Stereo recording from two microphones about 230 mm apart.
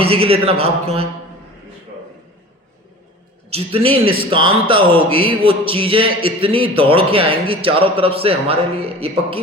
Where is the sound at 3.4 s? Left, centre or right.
Right.